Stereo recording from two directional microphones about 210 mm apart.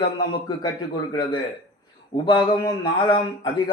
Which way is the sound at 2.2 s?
20° left (ahead or behind).